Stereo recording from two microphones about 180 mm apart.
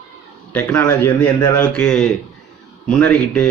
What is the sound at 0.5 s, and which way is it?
Speech, 10° left (ahead or behind).